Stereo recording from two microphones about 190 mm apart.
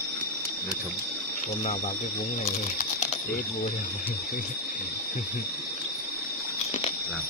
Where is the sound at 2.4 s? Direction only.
40° left (ahead or behind).